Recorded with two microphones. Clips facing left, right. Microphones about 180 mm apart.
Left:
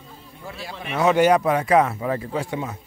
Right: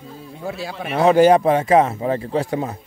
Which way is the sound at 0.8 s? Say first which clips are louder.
Right 4 dB; 35° right (ahead or behind).